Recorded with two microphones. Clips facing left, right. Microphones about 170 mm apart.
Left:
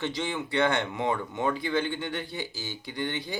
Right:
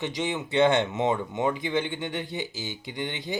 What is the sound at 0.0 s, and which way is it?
Speech, 20° right (ahead or behind).